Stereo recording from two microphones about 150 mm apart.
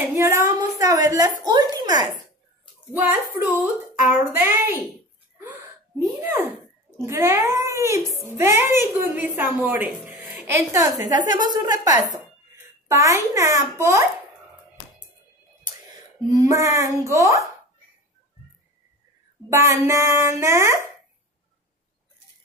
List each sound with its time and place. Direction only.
0.1 s a sound: 20° right (ahead or behind)
1.4 s a woman's voice: 25° right (ahead or behind)
2.9 s speech: 10° right (ahead or behind)
7.0 s a child's voice: 20° right (ahead or behind)
12.8 s a child's voice: 20° right (ahead or behind)
16.3 s a child's voice: 20° right (ahead or behind)
19.5 s speech: 20° right (ahead or behind)